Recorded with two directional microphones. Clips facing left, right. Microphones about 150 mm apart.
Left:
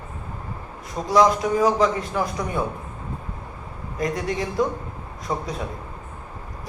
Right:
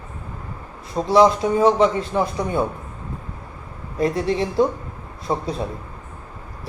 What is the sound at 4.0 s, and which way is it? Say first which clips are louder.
A man's voice: right 5 dB; 30° right (ahead or behind).